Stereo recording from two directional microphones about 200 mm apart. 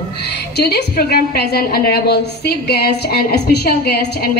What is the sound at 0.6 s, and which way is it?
A woman's voice, 50° left (ahead or behind).